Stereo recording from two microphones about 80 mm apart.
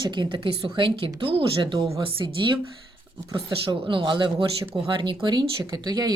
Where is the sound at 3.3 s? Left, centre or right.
Right.